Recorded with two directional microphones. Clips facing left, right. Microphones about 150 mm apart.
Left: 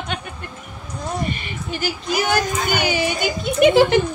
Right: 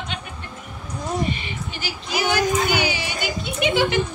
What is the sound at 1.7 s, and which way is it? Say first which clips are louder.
A woman's voice: left 7 dB; 45° left (ahead or behind).